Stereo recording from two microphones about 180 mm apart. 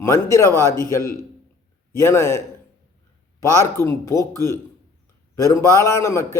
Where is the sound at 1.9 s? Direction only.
15° left (ahead or behind).